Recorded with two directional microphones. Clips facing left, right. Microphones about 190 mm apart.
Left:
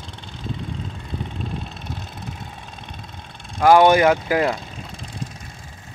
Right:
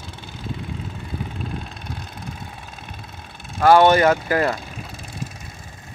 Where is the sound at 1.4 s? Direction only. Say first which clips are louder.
Left 1 dB; centre (ahead or behind).